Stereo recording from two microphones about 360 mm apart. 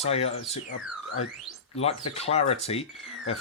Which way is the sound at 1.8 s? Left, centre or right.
Centre.